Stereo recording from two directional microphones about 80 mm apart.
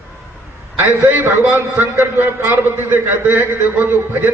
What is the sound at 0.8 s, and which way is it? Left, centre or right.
A man's voice, right.